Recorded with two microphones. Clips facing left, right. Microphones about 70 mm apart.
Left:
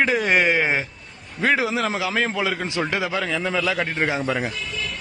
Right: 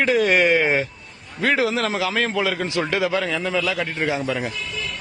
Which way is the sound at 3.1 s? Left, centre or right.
Centre.